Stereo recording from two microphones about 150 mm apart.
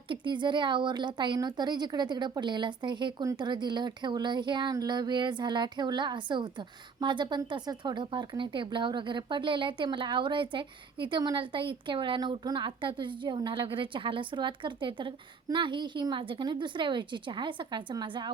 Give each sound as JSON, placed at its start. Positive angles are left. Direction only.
{"t": 0.1, "sound": "a woman's voice", "side_deg": -30}